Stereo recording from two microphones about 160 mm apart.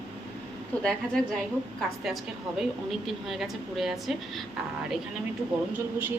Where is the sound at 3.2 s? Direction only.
Centre (ahead or behind).